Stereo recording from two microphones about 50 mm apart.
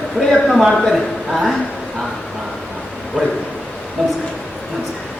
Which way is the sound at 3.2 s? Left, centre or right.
Centre.